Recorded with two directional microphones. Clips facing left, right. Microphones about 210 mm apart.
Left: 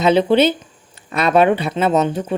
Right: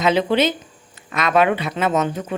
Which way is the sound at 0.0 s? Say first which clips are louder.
Left 4 dB; 30° left (ahead or behind).